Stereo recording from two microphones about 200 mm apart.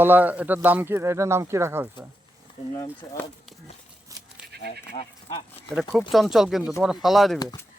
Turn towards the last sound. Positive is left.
turn(degrees=0)  # may be behind; listen again after turning